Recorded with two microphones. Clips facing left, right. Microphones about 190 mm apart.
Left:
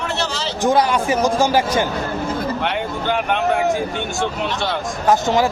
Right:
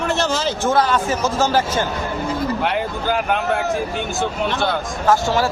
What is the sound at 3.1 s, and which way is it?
Speech, centre (ahead or behind).